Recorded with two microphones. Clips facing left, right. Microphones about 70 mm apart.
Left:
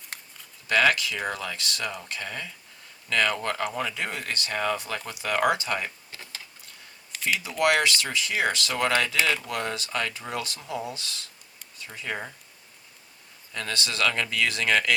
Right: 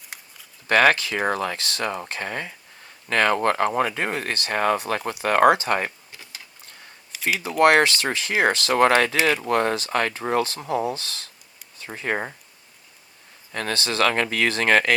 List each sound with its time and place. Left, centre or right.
0.7 s speech: right
7.3 s speech: right
13.5 s speech: right
13.7 s speech: right